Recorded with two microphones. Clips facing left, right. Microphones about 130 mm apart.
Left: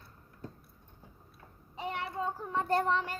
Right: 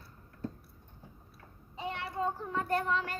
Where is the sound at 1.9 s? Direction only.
15° left (ahead or behind).